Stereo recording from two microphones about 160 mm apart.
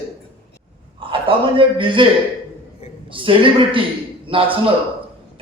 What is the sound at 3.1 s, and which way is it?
A man's voice, 30° right (ahead or behind).